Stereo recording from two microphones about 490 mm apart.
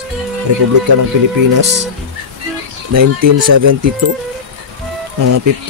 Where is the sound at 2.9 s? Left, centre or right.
Right.